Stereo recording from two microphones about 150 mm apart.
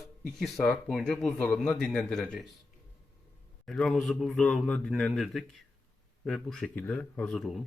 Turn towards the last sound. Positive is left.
turn(degrees=0)  # may be behind; listen again after turning